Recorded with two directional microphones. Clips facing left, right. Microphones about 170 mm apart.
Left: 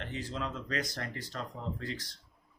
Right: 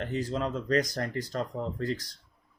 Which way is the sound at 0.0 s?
40° right (ahead or behind).